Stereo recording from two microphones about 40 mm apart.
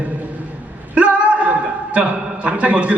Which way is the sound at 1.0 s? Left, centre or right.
Right.